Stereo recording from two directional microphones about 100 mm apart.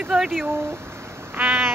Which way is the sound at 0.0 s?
5° right (ahead or behind).